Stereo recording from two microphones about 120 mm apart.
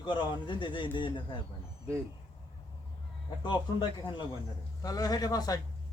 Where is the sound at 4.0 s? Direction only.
40° left (ahead or behind).